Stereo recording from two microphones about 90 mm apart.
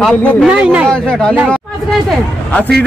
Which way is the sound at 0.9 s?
10° left (ahead or behind).